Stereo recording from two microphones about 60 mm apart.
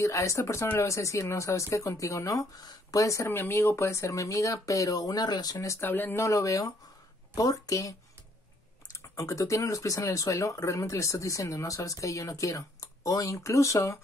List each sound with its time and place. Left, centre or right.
0.0 s speech: left
3.3 s speech: left
5.8 s speech: left
6.2 s speech: left
7.3 s speech: left
8.9 s speech: left